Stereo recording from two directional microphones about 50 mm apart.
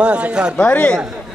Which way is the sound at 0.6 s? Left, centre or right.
Left.